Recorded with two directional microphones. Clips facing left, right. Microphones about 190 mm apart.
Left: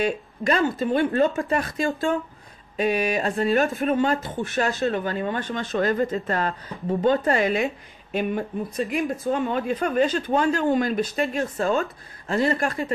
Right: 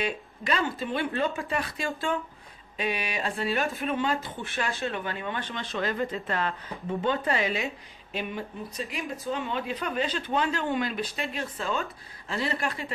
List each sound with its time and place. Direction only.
0.0 s speech: 45° left (ahead or behind)